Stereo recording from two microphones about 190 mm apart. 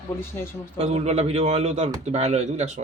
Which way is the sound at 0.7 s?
35° right (ahead or behind).